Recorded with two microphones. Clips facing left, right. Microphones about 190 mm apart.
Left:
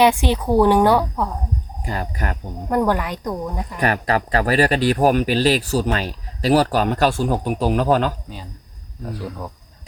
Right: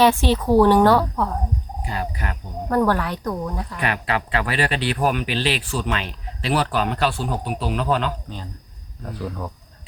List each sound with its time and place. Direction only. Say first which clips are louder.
0.0 s a woman's voice: left 1 dB; 15° left (ahead or behind)
1.8 s speech: left 2 dB; 45° left (ahead or behind)
2.6 s a woman's voice: even; 15° left (ahead or behind)
3.8 s speech: left 5 dB; 40° left (ahead or behind)